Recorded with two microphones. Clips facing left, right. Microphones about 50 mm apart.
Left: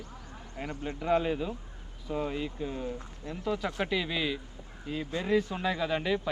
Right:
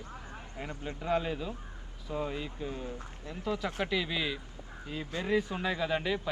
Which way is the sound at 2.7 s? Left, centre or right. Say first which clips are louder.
Left 4 dB; left.